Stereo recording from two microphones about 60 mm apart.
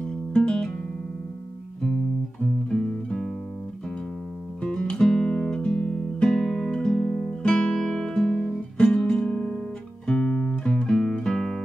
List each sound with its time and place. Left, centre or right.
0.3 s music: centre
2.4 s music: centre
4.6 s guitar: centre
6.2 s music: centre